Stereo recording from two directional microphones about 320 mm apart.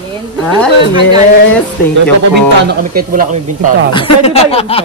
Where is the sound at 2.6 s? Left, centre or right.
Right.